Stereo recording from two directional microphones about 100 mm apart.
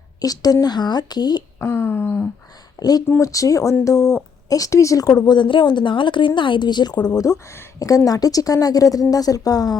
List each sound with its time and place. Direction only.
0.2 s speech: 40° left (ahead or behind)
1.6 s a sound: 20° left (ahead or behind)
2.7 s a woman's voice: 40° left (ahead or behind)
5.2 s a woman's voice: 50° left (ahead or behind)